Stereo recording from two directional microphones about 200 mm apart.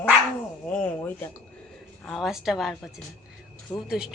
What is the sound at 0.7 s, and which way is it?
A woman's voice, 5° left (ahead or behind).